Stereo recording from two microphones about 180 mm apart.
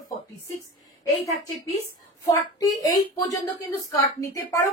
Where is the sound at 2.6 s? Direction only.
20° left (ahead or behind).